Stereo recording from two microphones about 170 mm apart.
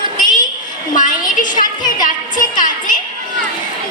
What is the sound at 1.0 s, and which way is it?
Music, 50° left (ahead or behind).